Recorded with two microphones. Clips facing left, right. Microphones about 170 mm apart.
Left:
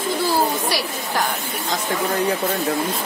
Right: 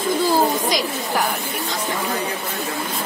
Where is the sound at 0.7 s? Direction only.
15° right (ahead or behind).